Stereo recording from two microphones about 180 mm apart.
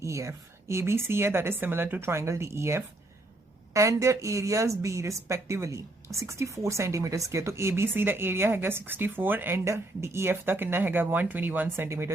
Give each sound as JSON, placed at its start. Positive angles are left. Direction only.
{"t": 0.0, "sound": "a woman's voice", "side_deg": -15}